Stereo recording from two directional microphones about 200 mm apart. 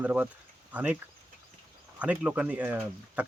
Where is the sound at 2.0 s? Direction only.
5° right (ahead or behind).